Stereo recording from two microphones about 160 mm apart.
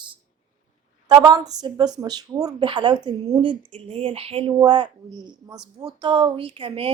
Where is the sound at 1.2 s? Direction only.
25° right (ahead or behind).